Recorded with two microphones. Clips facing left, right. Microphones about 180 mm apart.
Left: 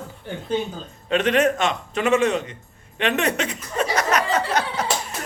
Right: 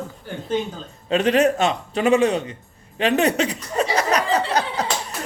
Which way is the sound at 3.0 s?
35° right (ahead or behind).